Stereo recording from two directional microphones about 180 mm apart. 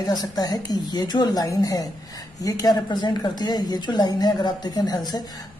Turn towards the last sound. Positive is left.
turn(degrees=20)  # may be behind; listen again after turning